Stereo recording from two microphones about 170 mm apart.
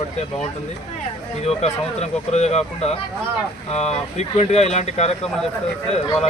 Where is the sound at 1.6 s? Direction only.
40° left (ahead or behind).